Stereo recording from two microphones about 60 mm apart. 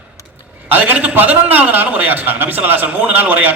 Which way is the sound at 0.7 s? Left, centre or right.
Right.